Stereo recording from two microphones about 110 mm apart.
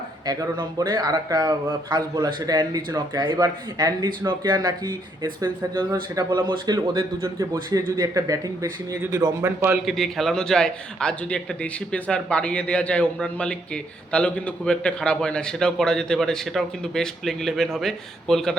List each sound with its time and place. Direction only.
0.3 s speech: 35° right (ahead or behind)
9.8 s a man's voice: centre (ahead or behind)